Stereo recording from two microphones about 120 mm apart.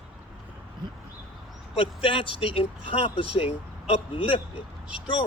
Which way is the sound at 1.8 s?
50° left (ahead or behind).